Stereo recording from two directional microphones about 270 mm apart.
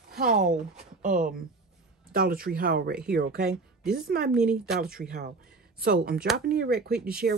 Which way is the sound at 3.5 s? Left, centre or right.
Centre.